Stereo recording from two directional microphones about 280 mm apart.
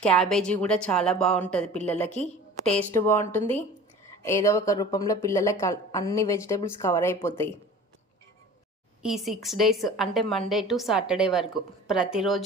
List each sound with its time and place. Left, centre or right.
0.0 s a woman's voice: centre
2.0 s a woman's voice: left
2.6 s speech: centre
9.0 s a woman's voice: centre